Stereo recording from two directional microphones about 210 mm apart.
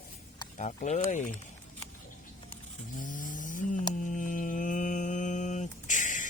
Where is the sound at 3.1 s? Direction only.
40° left (ahead or behind).